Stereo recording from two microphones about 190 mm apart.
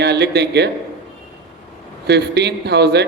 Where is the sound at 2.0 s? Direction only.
60° right (ahead or behind).